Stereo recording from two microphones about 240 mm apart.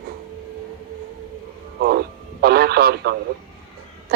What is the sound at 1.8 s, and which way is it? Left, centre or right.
A man's voice, right.